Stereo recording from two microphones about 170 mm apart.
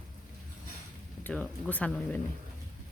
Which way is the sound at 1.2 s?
5° left (ahead or behind).